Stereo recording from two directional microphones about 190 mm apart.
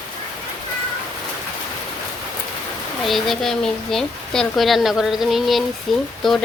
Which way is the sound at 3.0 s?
Centre (ahead or behind).